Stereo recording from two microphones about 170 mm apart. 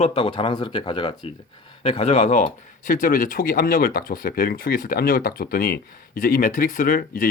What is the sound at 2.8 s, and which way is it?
Speech, 50° left (ahead or behind).